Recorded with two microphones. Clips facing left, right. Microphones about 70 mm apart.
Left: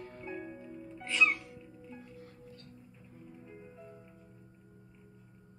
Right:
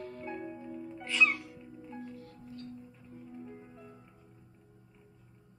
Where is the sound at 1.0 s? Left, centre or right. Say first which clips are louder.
Right 1 dB; centre.